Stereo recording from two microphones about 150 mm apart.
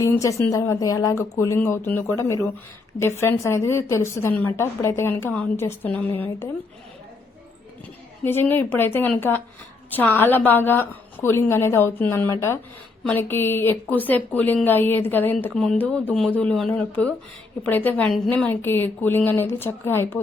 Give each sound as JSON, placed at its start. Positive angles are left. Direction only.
{"t": 0.0, "sound": "a woman's voice", "side_deg": 20}
{"t": 8.2, "sound": "a woman's voice", "side_deg": 15}